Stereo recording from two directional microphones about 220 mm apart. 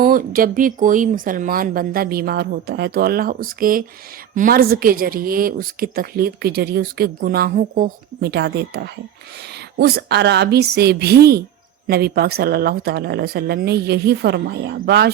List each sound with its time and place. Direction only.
0.0 s speech: 40° right (ahead or behind)